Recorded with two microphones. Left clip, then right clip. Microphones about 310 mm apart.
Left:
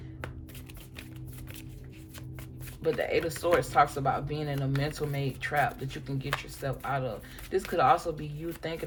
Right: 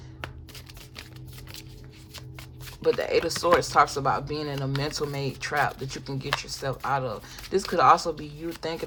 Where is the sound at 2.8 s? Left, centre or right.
Centre.